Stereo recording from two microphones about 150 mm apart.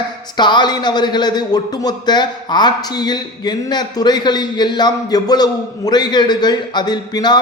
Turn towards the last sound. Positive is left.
turn(degrees=30)  # may be behind; listen again after turning